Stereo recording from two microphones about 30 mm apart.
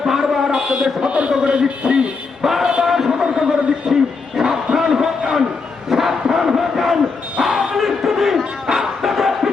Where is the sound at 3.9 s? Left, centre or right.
Centre.